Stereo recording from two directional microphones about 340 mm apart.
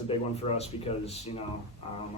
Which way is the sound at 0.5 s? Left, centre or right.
Centre.